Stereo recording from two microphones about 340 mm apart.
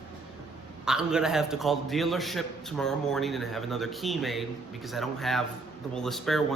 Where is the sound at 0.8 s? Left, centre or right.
Centre.